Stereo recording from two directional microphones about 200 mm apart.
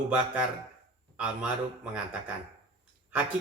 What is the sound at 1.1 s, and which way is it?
A man's voice, 5° right (ahead or behind).